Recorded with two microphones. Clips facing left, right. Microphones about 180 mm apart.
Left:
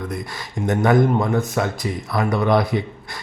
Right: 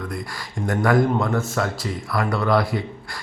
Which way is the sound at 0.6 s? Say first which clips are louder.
Left 2 dB; 20° left (ahead or behind).